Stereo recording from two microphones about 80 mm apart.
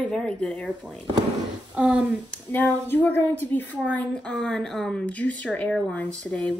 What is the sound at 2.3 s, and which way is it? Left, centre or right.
Speech, left.